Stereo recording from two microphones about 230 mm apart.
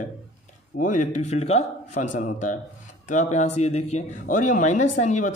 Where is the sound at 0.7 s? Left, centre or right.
Left.